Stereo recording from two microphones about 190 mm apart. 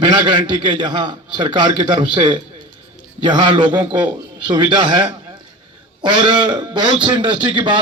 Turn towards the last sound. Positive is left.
turn(degrees=-25)  # may be behind; listen again after turning